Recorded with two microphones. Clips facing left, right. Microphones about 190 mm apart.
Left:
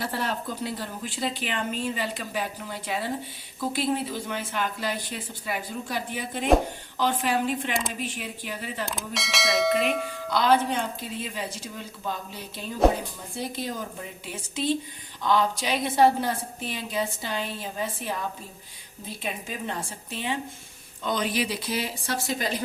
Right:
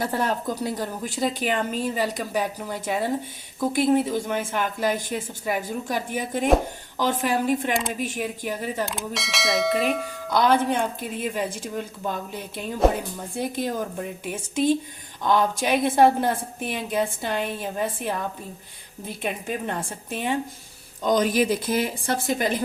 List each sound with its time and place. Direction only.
0.0 s a woman's voice: 45° right (ahead or behind)
8.9 s speech: centre (ahead or behind)
10.2 s a woman's voice: 50° right (ahead or behind)
13.3 s a woman's voice: 50° right (ahead or behind)
19.2 s a woman's voice: 55° right (ahead or behind)